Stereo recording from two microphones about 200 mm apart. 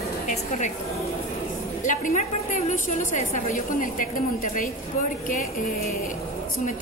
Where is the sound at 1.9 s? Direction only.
40° left (ahead or behind).